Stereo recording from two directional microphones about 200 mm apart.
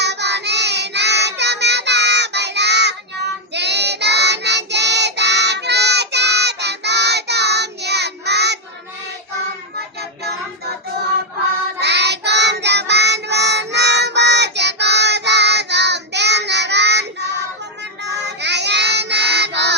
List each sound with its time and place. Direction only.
0.0 s child singing: 60° right (ahead or behind)
11.8 s child singing: 55° right (ahead or behind)